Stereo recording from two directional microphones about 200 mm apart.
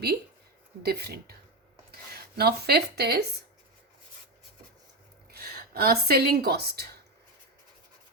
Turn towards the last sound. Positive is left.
turn(degrees=-50)  # may be behind; listen again after turning